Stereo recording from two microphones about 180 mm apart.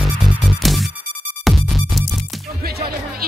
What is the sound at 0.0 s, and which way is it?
Music, centre (ahead or behind).